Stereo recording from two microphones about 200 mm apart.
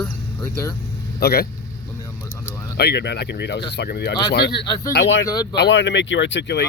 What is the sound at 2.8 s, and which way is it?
Speech, 55° left (ahead or behind).